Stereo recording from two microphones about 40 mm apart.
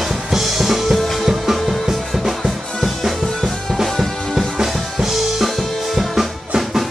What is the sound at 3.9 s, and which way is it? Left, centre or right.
Music, centre.